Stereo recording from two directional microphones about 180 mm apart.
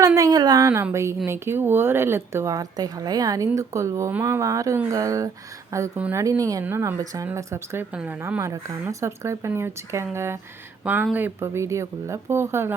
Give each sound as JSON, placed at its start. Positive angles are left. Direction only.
{"t": 0.0, "sound": "a woman's voice", "side_deg": -20}